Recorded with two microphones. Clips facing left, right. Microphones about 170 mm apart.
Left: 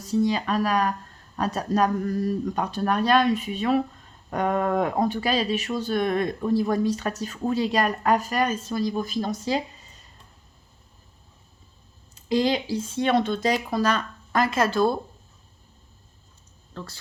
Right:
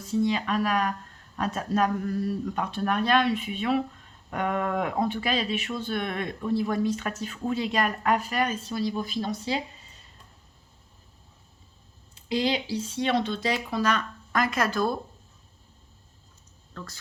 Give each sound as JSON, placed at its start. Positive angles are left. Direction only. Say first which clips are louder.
{"t": 0.0, "sound": "speech", "louder": "left 2 dB", "side_deg": 40}
{"t": 12.1, "sound": "speech", "louder": "left 4 dB", "side_deg": 45}
{"t": 16.7, "sound": "a woman's voice", "louder": "left 3 dB", "side_deg": 30}